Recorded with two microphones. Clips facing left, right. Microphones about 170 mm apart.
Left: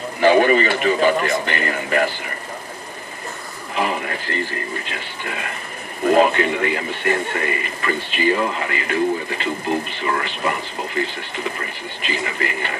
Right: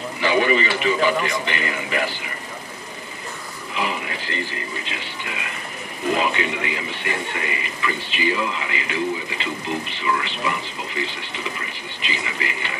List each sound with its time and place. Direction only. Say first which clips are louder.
0.2 s speech: left 5 dB; 50° left (ahead or behind)
3.7 s speech: left 4 dB; 45° left (ahead or behind)